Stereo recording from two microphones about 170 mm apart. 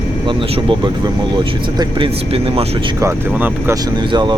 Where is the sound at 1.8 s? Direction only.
30° right (ahead or behind).